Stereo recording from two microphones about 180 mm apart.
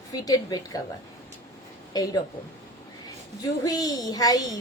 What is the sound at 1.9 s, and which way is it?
Speech, 20° left (ahead or behind).